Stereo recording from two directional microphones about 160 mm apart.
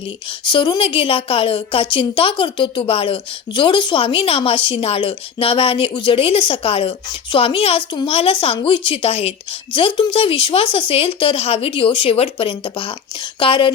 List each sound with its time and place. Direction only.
0.3 s a woman's voice: 30° left (ahead or behind)